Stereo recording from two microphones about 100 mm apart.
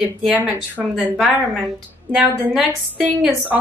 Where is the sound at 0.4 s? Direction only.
15° right (ahead or behind).